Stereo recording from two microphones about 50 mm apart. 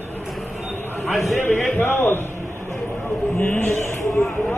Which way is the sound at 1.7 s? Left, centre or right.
Left.